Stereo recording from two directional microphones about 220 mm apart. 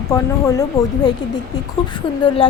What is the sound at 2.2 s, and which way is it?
Speech, 20° left (ahead or behind).